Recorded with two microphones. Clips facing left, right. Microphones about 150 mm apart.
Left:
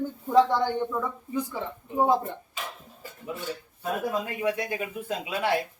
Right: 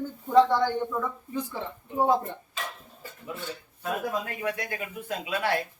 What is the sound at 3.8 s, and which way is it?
A man's voice, 20° left (ahead or behind).